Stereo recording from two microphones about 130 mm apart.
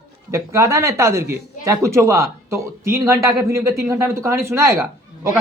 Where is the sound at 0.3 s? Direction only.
20° right (ahead or behind).